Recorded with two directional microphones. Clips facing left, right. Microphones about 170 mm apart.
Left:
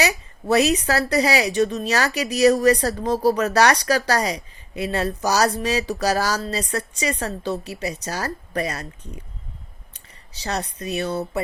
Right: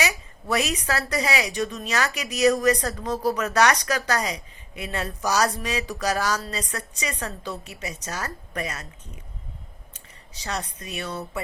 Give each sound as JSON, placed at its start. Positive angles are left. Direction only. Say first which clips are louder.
{"t": 0.0, "sound": "a woman's voice", "louder": "left 5 dB", "side_deg": 30}
{"t": 9.9, "sound": "speech", "louder": "right 1 dB", "side_deg": 30}